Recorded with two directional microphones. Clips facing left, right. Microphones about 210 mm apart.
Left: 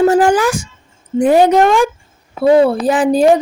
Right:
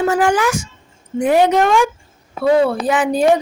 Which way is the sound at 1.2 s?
35° left (ahead or behind).